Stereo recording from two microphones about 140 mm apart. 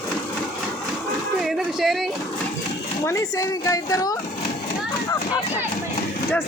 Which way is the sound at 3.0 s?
20° left (ahead or behind).